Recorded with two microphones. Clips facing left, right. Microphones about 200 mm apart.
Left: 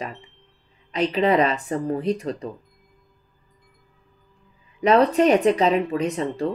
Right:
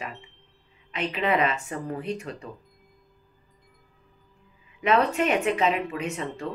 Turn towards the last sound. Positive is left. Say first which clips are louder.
# left 7 dB
turn(degrees=35)  # may be behind; listen again after turning